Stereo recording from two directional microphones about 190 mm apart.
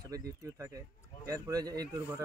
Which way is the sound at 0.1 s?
20° right (ahead or behind).